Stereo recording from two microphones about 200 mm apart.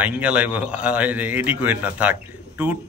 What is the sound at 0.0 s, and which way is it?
A man's voice, 5° right (ahead or behind).